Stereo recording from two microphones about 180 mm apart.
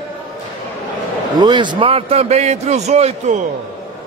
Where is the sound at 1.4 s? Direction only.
25° right (ahead or behind).